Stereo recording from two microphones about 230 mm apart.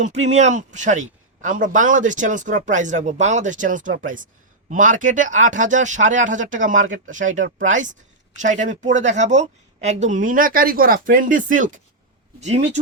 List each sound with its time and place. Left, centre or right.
0.0 s a man's voice: right